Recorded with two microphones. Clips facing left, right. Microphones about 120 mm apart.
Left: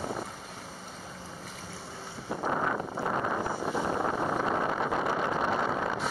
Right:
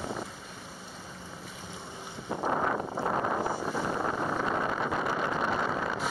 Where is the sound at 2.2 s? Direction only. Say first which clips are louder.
Right 1 dB; 20° right (ahead or behind).